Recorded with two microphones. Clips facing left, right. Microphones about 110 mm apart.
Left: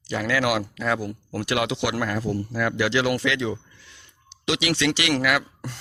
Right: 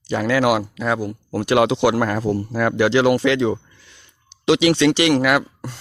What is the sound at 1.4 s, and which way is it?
Speech, 35° right (ahead or behind).